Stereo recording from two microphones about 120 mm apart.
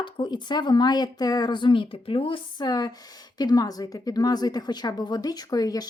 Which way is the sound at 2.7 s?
30° left (ahead or behind).